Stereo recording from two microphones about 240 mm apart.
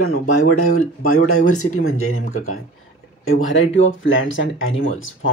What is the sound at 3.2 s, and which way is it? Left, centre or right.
Speech, left.